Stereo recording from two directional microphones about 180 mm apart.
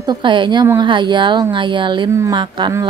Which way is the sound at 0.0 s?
25° right (ahead or behind).